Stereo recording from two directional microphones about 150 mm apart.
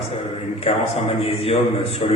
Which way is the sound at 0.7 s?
45° left (ahead or behind).